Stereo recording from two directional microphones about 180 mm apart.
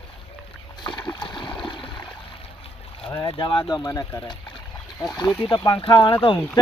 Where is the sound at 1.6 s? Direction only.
25° left (ahead or behind).